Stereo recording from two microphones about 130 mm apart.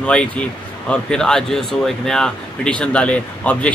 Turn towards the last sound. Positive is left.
turn(degrees=10)  # may be behind; listen again after turning